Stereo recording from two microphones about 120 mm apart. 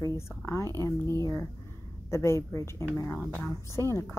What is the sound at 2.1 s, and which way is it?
A woman's voice, 20° left (ahead or behind).